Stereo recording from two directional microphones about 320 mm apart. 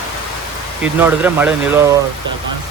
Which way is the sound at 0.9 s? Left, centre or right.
Centre.